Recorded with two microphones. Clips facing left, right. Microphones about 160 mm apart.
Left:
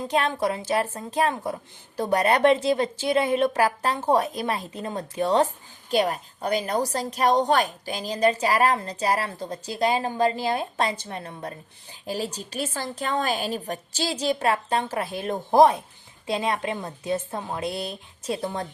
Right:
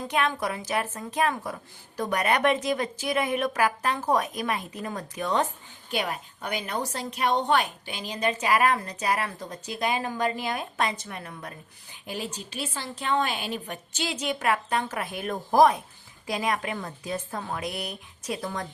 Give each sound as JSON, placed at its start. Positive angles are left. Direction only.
{"t": 0.1, "sound": "a woman's voice", "side_deg": 30}